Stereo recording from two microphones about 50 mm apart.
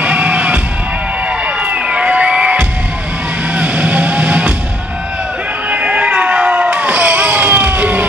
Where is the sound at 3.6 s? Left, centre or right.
Right.